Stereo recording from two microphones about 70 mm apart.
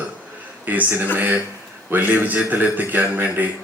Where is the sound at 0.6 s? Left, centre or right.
Right.